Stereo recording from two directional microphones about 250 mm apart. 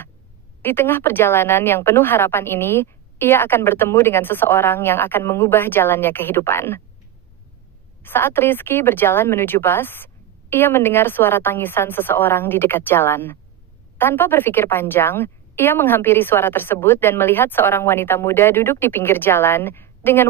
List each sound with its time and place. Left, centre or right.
0.6 s a woman's voice: centre
8.0 s a woman's voice: centre